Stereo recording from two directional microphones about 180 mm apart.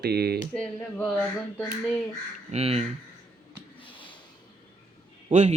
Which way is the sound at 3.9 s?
25° left (ahead or behind).